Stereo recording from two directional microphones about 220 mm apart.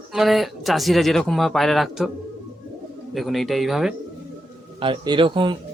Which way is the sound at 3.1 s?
Centre (ahead or behind).